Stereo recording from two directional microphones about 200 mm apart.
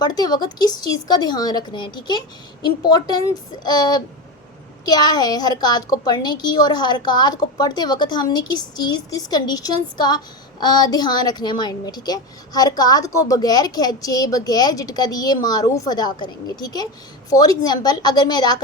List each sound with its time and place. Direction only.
0.0 s a woman's voice: 20° left (ahead or behind)